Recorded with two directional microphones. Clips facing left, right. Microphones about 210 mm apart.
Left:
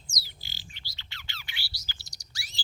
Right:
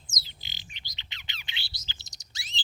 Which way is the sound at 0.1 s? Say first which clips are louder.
Even; 20° right (ahead or behind).